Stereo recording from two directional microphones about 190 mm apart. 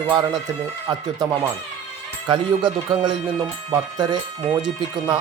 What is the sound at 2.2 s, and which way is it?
Speech, 25° right (ahead or behind).